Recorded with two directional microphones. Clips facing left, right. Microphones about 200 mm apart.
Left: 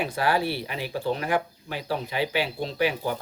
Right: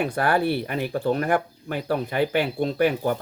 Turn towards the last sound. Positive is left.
turn(degrees=-50)  # may be behind; listen again after turning